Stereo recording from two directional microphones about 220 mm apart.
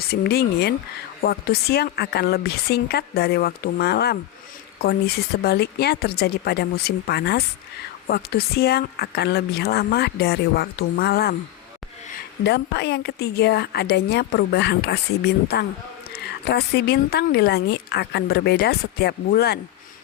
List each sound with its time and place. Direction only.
0.1 s speech: 45° left (ahead or behind)
12.4 s speech: 50° left (ahead or behind)